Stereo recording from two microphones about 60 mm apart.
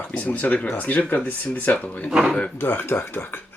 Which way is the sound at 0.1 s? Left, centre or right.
Left.